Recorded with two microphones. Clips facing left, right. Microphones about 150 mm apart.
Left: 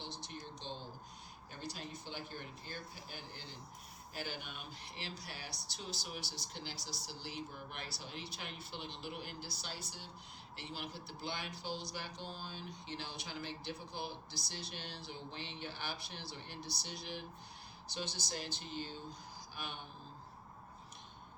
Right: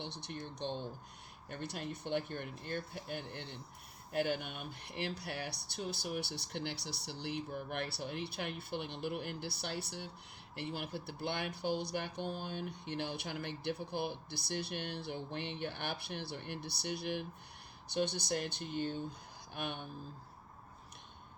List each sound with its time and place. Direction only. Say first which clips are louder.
0.0 s speech: right 4 dB; 60° right (ahead or behind)